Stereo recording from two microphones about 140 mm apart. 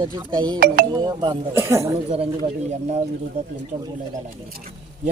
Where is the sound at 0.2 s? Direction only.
30° right (ahead or behind).